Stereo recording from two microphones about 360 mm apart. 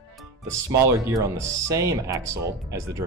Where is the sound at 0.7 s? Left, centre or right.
Centre.